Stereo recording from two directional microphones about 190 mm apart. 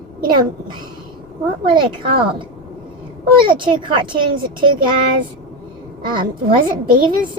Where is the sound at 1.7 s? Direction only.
25° right (ahead or behind).